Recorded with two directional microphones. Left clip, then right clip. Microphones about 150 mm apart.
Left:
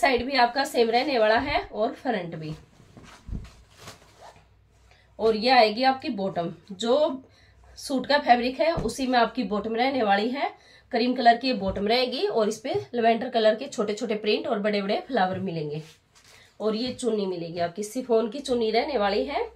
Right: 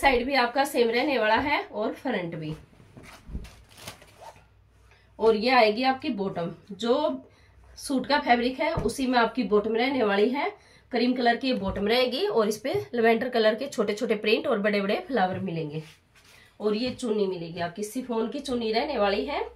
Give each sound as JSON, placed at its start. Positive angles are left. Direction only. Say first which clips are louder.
{"t": 0.0, "sound": "a woman's voice", "louder": "left 1 dB", "side_deg": 0}
{"t": 5.2, "sound": "a woman's voice", "louder": "left 1 dB", "side_deg": 25}
{"t": 11.9, "sound": "speech", "louder": "right 1 dB", "side_deg": -15}
{"t": 15.0, "sound": "a woman's voice", "louder": "left 1 dB", "side_deg": 0}
{"t": 16.7, "sound": "speech", "louder": "even", "side_deg": 20}